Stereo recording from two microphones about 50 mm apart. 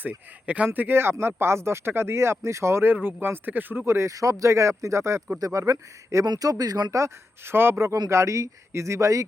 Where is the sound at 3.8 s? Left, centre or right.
Right.